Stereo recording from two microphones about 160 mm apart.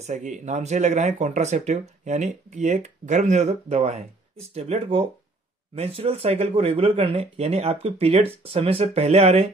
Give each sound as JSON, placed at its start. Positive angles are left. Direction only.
{"t": 0.0, "sound": "speech", "side_deg": -50}